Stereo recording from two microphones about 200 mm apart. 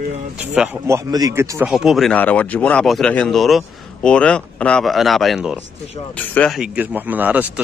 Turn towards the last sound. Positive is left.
turn(degrees=-10)  # may be behind; listen again after turning